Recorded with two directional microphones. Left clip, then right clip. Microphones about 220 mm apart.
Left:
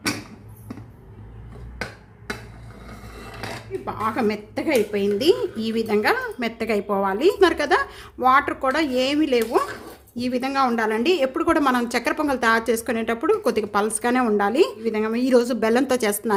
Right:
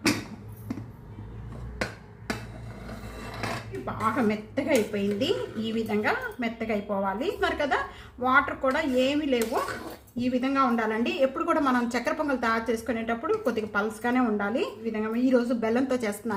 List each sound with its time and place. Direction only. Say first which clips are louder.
3.8 s a woman's voice: left 3 dB; 55° left (ahead or behind)